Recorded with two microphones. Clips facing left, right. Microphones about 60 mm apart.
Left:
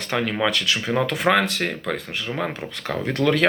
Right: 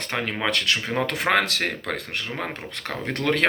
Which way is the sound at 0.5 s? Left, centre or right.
Right.